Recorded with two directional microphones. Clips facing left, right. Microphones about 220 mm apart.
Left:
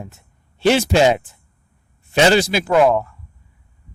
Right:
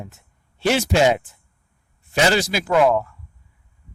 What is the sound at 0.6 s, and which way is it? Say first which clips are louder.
Speech: left 3 dB; 30° left (ahead or behind).